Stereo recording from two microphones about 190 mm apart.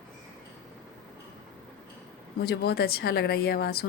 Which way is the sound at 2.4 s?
55° left (ahead or behind).